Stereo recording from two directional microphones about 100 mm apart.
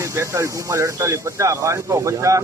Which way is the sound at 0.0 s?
30° right (ahead or behind).